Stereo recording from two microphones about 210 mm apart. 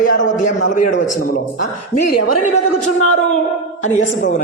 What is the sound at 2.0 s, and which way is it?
Speech, 45° left (ahead or behind).